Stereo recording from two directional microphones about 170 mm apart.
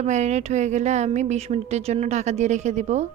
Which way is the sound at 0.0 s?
40° right (ahead or behind).